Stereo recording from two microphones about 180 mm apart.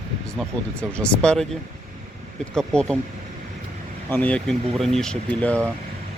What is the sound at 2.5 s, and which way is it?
Speech, 5° left (ahead or behind).